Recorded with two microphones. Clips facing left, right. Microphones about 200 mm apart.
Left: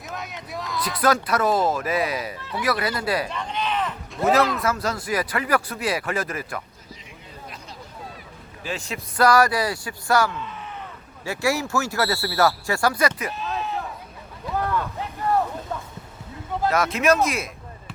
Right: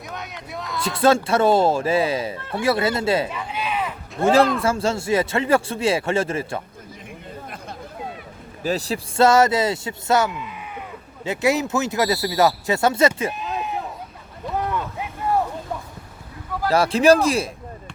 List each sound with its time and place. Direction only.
0.1 s a sound: centre (ahead or behind)
0.8 s speech: 25° right (ahead or behind)
3.2 s a sound: 5° right (ahead or behind)
4.2 s speech: 30° right (ahead or behind)
8.6 s speech: 35° right (ahead or behind)
13.3 s sheep: 15° right (ahead or behind)
14.6 s vehicle: 20° right (ahead or behind)
16.6 s speech: 30° right (ahead or behind)